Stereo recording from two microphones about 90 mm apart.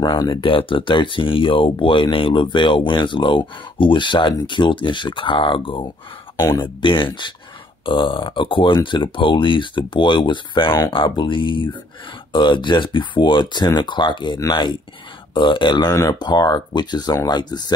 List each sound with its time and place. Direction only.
0.0 s speech: 50° left (ahead or behind)
0.3 s speech: 80° left; by 15.9 s 60° left (ahead or behind)
15.9 s speech: 40° left (ahead or behind)
16.2 s speech: 50° left (ahead or behind)